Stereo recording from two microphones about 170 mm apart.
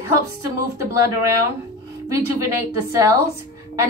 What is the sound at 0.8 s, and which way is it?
A woman's voice, 20° right (ahead or behind).